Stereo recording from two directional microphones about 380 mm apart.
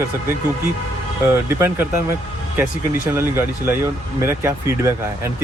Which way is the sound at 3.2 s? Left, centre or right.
Centre.